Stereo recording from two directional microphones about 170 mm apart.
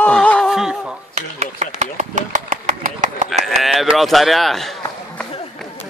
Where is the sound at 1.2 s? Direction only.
45° right (ahead or behind).